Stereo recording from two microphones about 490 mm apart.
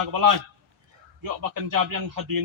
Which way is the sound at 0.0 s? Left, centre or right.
Right.